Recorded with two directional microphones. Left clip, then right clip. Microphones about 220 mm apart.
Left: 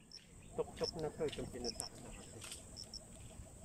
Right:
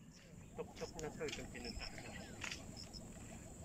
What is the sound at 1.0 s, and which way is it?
Speech, 15° left (ahead or behind).